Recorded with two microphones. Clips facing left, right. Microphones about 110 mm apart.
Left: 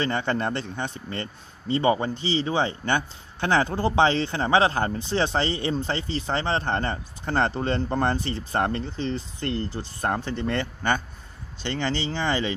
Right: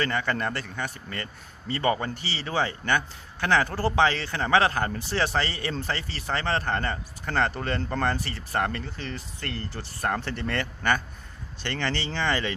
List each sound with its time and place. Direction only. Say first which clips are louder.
0.0 s speech: left 2 dB; 25° left (ahead or behind)